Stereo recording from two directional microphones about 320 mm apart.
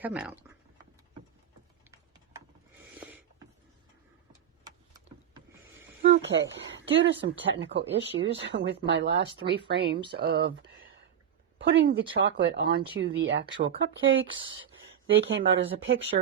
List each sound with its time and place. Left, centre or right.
0.0 s speech: centre
4.3 s vehicle: centre
6.1 s speech: right